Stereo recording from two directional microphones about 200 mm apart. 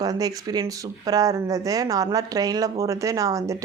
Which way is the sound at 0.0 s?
20° right (ahead or behind).